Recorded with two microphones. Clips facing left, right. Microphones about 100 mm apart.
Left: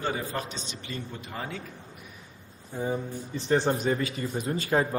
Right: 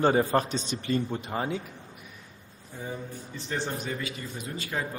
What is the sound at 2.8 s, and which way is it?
Speech, 35° left (ahead or behind).